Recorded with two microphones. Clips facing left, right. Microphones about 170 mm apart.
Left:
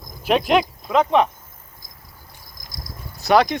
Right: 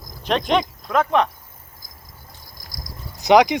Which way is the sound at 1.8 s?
25° left (ahead or behind).